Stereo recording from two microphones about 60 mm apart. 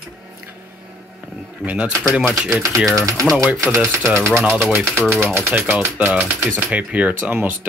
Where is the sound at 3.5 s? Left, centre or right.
Right.